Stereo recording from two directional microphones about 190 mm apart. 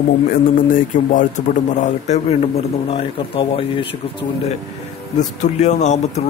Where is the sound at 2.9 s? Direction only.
30° left (ahead or behind).